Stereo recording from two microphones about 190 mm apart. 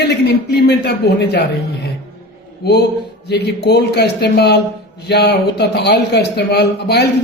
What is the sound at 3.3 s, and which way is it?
A man's voice, 60° left (ahead or behind).